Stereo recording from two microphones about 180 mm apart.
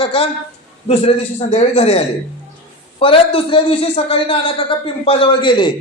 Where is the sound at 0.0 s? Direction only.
30° left (ahead or behind).